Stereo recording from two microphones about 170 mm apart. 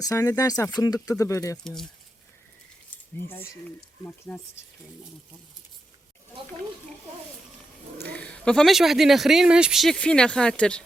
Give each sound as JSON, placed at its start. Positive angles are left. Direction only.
{"t": 0.0, "sound": "speech", "side_deg": 20}
{"t": 1.6, "sound": "speech", "side_deg": 0}
{"t": 3.2, "sound": "speech", "side_deg": 15}
{"t": 8.1, "sound": "speech", "side_deg": 5}